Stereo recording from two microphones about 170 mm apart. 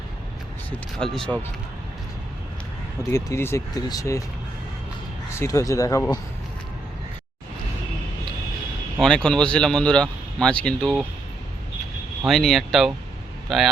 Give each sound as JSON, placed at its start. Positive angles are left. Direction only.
{"t": 0.9, "sound": "speech", "side_deg": 5}
{"t": 3.1, "sound": "speech", "side_deg": 20}
{"t": 5.4, "sound": "speech", "side_deg": 20}
{"t": 9.0, "sound": "speech", "side_deg": 5}
{"t": 12.2, "sound": "speech", "side_deg": 0}